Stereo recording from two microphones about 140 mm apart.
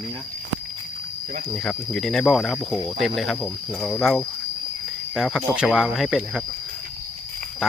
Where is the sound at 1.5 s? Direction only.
5° left (ahead or behind).